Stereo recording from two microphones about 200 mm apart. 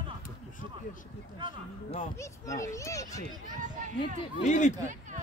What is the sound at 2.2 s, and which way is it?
Speech, 15° left (ahead or behind).